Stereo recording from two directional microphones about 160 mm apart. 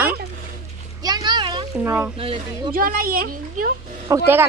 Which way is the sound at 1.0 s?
25° right (ahead or behind).